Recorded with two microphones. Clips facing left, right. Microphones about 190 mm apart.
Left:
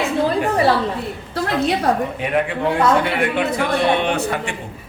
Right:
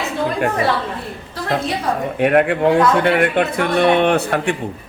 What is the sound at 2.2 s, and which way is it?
A man's voice, 60° right (ahead or behind).